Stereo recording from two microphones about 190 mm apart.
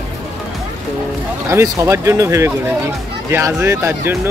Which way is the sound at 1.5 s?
15° right (ahead or behind).